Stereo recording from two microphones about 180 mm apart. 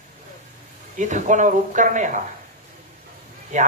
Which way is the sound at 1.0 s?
40° right (ahead or behind).